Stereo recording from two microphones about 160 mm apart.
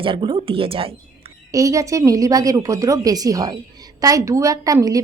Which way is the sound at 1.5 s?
20° right (ahead or behind).